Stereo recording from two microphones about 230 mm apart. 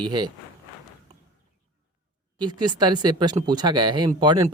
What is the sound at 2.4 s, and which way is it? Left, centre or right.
Speech, centre.